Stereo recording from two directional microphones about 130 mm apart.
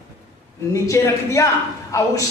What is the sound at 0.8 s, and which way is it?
Speech, 20° left (ahead or behind).